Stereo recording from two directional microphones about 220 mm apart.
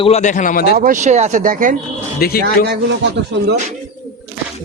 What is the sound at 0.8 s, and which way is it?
Speech, 35° right (ahead or behind).